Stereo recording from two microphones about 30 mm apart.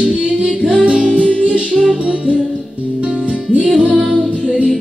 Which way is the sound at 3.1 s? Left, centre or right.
Right.